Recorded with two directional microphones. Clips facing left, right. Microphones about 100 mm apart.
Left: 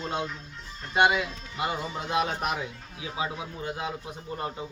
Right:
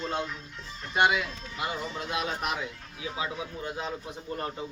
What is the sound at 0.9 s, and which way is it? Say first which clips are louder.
Speech: left 2 dB; 20° left (ahead or behind).